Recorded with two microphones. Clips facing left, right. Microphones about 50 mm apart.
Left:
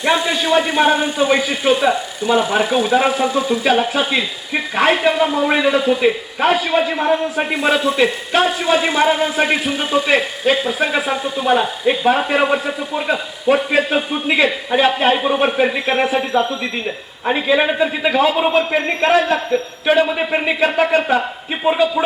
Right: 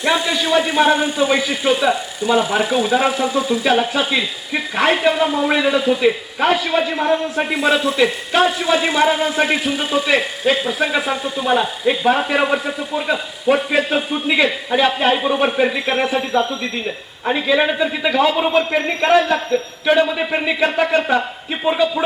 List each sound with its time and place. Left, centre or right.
0.0 s a man's voice: centre
19.8 s a man's voice: centre